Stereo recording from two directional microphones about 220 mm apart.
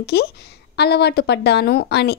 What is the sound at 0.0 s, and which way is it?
A woman's voice, 45° left (ahead or behind).